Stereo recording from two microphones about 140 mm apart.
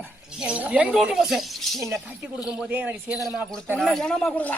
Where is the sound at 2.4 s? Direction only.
10° right (ahead or behind).